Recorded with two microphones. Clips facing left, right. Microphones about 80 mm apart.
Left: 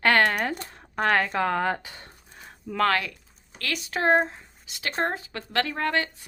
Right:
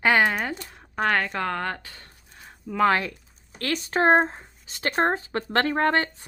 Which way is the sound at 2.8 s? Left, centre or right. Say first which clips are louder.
Right 3 dB; right.